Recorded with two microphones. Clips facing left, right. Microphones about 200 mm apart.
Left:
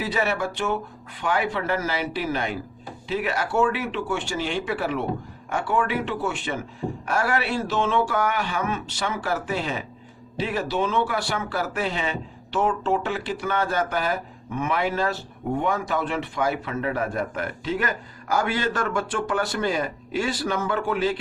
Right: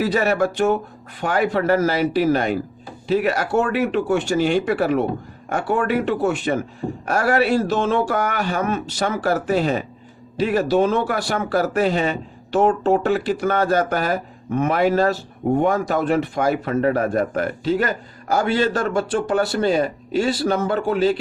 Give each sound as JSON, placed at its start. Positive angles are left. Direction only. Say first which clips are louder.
{"t": 0.0, "sound": "speech", "louder": "right 7 dB", "side_deg": -40}